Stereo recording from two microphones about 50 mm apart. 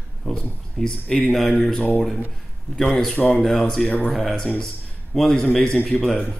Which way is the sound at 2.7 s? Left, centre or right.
Centre.